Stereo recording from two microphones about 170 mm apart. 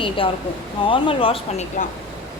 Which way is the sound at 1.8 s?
55° left (ahead or behind).